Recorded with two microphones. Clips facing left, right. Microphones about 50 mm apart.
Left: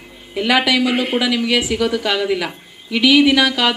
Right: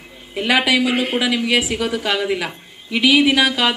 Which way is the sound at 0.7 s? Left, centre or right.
Right.